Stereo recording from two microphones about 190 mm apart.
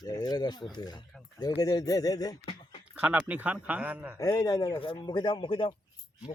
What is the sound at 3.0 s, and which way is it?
Speech, 10° right (ahead or behind).